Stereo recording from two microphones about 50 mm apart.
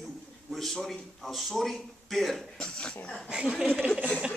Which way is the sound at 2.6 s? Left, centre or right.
Centre.